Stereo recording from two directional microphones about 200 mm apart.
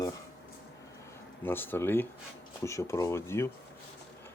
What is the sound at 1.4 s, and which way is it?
Speech, 10° left (ahead or behind).